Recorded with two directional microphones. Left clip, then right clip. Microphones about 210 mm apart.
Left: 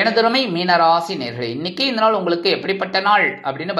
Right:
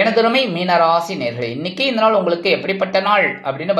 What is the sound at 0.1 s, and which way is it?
Speech, 15° left (ahead or behind).